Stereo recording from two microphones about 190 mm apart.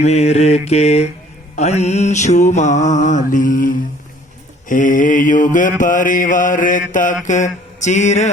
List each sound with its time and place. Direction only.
0.0 s mantra: 35° left (ahead or behind)